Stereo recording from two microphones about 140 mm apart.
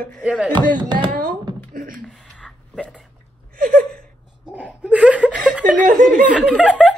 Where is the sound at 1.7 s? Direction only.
90° right.